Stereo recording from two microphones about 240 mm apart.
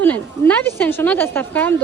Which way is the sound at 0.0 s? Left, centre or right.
Centre.